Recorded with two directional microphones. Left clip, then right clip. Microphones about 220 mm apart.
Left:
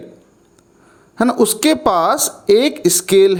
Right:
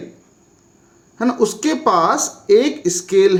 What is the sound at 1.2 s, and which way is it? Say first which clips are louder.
A woman's voice: left 3 dB; 45° left (ahead or behind).